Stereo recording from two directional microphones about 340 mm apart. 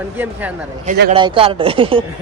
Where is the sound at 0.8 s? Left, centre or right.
Right.